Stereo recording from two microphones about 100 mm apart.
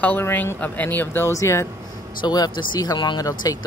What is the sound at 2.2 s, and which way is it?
Speech, 45° left (ahead or behind).